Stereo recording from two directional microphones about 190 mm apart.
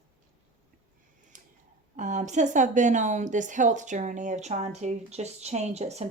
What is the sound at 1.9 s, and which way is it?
A woman's voice, 40° right (ahead or behind).